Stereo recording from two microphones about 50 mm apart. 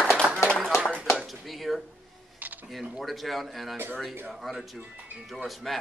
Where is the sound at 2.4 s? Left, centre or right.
Right.